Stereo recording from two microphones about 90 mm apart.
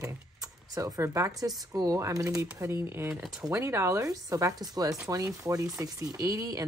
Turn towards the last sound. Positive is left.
turn(degrees=-40)  # may be behind; listen again after turning